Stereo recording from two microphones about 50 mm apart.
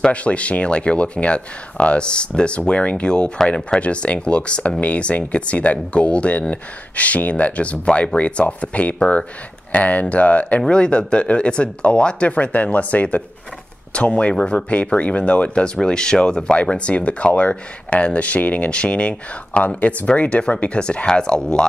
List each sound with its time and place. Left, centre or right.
0.1 s speech: left